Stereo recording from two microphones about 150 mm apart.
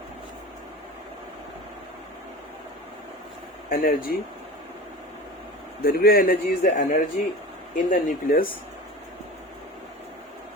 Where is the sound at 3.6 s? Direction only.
70° left (ahead or behind).